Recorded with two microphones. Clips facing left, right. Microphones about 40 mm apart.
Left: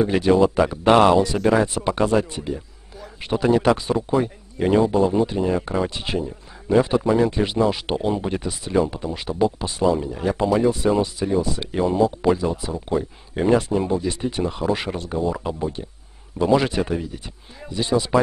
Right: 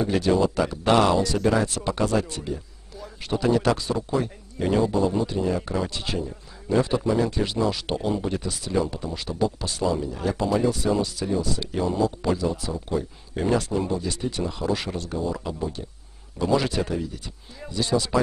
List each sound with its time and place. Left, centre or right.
0.0 s speech: left